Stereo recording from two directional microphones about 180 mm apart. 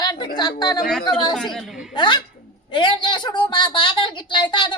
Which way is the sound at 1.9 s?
25° left (ahead or behind).